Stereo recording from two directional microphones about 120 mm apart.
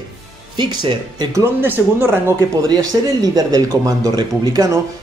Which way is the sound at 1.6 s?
20° right (ahead or behind).